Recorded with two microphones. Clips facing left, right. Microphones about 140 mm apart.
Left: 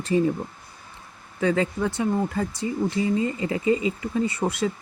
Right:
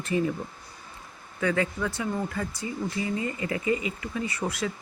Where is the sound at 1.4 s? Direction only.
30° left (ahead or behind).